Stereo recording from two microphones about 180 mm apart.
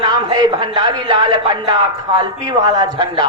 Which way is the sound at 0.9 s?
25° right (ahead or behind).